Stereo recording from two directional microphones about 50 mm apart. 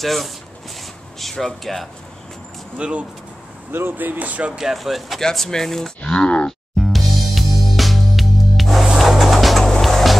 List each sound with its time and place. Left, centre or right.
0.0 s speech: centre
2.8 s speech: right
3.9 s speech: right
4.6 s speech: centre
5.2 s speech: centre
6.1 s grunt: left
6.8 s music: centre